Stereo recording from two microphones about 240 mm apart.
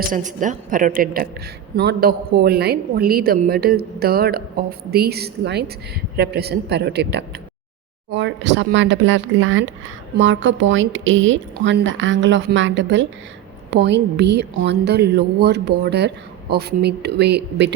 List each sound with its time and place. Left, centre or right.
0.1 s a woman's voice: right